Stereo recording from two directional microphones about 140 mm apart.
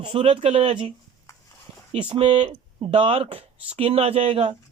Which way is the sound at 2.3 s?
35° right (ahead or behind).